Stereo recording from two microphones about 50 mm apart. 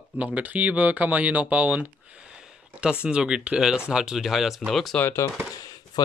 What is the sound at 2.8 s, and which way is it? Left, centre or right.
Speech, right.